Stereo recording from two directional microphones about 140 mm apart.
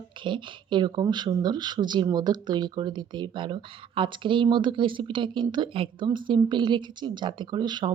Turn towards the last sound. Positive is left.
turn(degrees=-30)  # may be behind; listen again after turning